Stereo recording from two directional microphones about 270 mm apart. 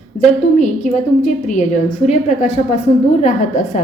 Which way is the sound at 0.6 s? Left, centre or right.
Left.